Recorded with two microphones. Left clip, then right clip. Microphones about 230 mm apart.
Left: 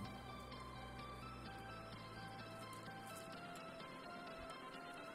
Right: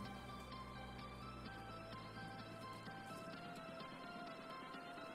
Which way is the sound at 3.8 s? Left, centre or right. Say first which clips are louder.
Right 1 dB; centre.